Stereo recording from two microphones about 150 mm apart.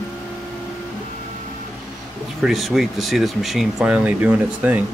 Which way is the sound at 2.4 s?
Centre (ahead or behind).